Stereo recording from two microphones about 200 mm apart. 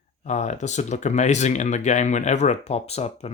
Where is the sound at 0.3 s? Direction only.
35° left (ahead or behind).